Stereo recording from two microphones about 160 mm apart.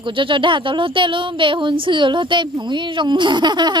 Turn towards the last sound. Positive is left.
turn(degrees=-25)  # may be behind; listen again after turning